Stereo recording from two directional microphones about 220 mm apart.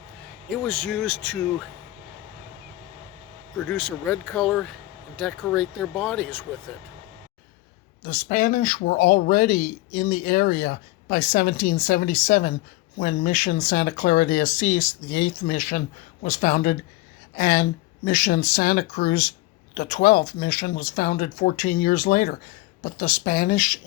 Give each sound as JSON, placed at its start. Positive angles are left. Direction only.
{"t": 0.5, "sound": "speech", "side_deg": 0}
{"t": 3.6, "sound": "speech", "side_deg": 5}
{"t": 8.0, "sound": "speech", "side_deg": 35}